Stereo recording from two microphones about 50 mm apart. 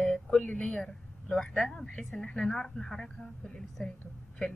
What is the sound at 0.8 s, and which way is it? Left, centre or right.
A woman's voice, centre.